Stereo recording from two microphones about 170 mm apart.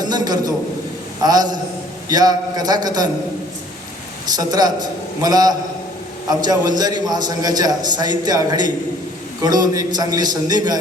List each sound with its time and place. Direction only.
0.0 s a sound: 25° right (ahead or behind)
1.2 s a man's voice: 25° right (ahead or behind)
4.4 s a man's voice: 25° right (ahead or behind)